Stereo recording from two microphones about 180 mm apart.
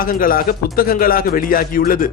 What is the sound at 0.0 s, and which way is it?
Speech, 50° left (ahead or behind).